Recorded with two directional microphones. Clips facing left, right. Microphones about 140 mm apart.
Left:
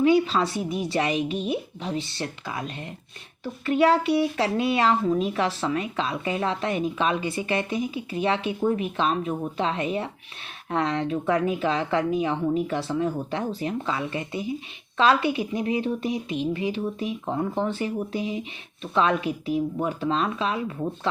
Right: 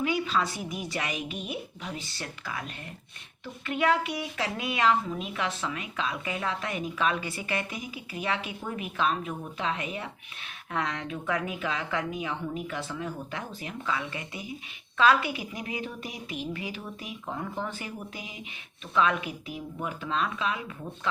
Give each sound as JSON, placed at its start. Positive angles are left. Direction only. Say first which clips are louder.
{"t": 0.0, "sound": "a woman's voice", "louder": "left 8 dB", "side_deg": 30}
{"t": 3.4, "sound": "speech", "louder": "left 7 dB", "side_deg": 35}